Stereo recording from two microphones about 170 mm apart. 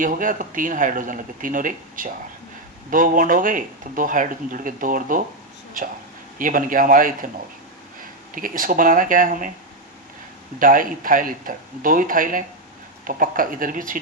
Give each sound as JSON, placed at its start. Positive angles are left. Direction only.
{"t": 0.0, "sound": "speech", "side_deg": -50}
{"t": 6.4, "sound": "speech", "side_deg": -55}
{"t": 8.4, "sound": "speech", "side_deg": -55}
{"t": 10.6, "sound": "speech", "side_deg": -55}